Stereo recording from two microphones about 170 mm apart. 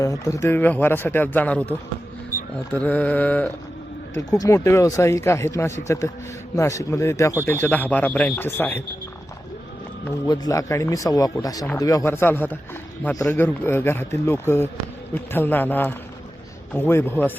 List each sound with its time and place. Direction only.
0.0 s speech: 20° left (ahead or behind)
10.2 s a man's voice: 20° left (ahead or behind)